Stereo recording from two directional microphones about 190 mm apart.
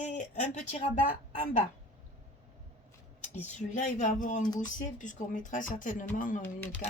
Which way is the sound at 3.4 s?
40° left (ahead or behind).